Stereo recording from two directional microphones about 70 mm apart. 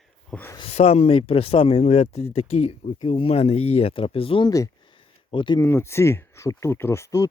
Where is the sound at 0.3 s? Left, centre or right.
Centre.